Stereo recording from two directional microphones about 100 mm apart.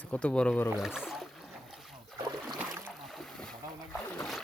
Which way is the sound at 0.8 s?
5° right (ahead or behind).